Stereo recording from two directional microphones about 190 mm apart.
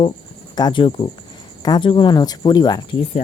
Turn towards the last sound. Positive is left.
turn(degrees=25)  # may be behind; listen again after turning